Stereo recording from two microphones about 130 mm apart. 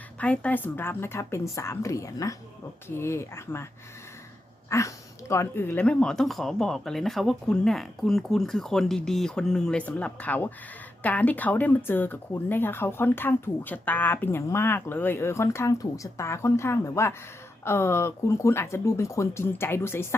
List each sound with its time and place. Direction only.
0.2 s speech: 10° left (ahead or behind)
4.7 s speech: 25° left (ahead or behind)